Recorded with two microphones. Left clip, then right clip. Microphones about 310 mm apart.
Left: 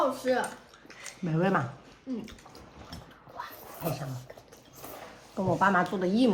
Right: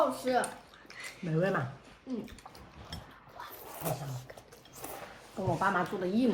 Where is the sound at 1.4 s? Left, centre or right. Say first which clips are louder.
Left 3 dB; centre.